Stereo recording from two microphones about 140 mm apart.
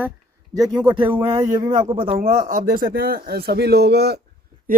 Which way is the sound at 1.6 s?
35° right (ahead or behind).